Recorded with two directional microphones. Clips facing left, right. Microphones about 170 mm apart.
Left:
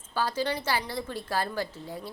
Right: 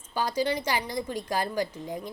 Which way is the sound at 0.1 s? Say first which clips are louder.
Right 2 dB; 15° right (ahead or behind).